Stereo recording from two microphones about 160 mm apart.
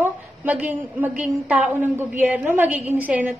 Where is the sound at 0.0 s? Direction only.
10° right (ahead or behind).